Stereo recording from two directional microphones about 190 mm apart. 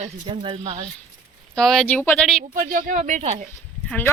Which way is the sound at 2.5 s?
45° right (ahead or behind).